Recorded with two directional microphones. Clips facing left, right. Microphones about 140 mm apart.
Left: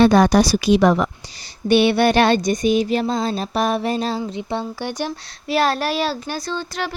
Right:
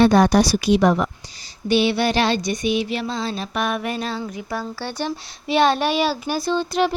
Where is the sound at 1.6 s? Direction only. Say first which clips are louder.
Left 4 dB; 60° left (ahead or behind); by 4.2 s 35° left (ahead or behind).